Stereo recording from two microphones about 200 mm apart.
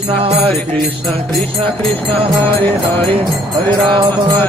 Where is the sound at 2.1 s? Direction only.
10° left (ahead or behind).